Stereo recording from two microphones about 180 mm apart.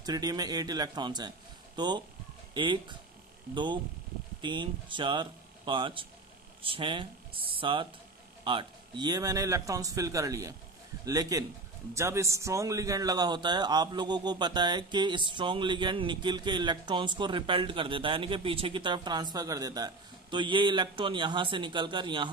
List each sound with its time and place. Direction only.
0.0 s a man's voice: 20° right (ahead or behind)